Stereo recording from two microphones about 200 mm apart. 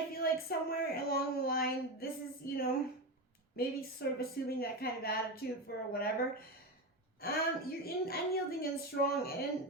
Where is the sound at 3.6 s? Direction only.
50° left (ahead or behind).